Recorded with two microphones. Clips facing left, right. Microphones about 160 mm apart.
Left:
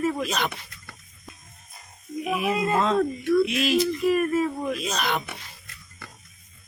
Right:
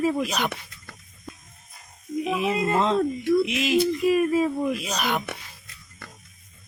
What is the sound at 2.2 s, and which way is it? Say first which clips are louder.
Speech: even; 25° right (ahead or behind).